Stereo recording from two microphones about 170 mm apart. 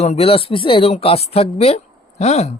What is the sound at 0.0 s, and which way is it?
Speech, 40° left (ahead or behind).